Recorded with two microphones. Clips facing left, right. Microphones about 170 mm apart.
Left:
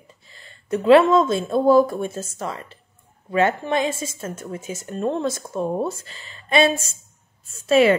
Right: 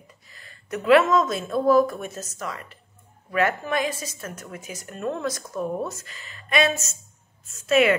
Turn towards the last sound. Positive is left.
turn(degrees=30)  # may be behind; listen again after turning